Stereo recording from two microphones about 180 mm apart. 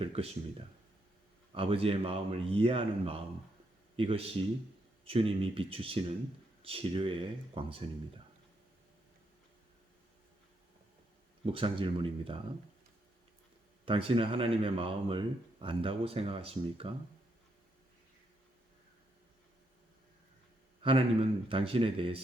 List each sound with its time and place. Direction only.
0.0 s speech: 30° right (ahead or behind)
1.5 s speech: 30° right (ahead or behind)
11.4 s speech: 30° right (ahead or behind)
13.8 s speech: 30° right (ahead or behind)
20.8 s speech: 30° right (ahead or behind)